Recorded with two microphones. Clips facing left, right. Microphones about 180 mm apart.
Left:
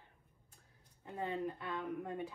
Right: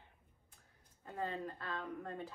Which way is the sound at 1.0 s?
15° left (ahead or behind).